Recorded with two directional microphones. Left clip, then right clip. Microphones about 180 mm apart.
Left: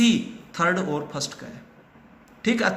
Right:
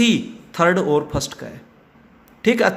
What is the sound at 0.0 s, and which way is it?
A man's voice, 50° right (ahead or behind).